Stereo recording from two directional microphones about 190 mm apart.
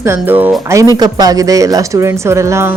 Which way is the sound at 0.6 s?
15° right (ahead or behind).